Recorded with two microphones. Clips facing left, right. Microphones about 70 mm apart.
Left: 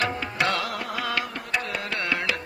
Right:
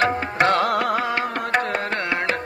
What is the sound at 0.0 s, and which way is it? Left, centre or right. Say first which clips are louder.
Music: right 6 dB; right.